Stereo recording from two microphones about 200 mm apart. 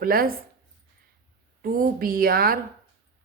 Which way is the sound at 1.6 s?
45° right (ahead or behind).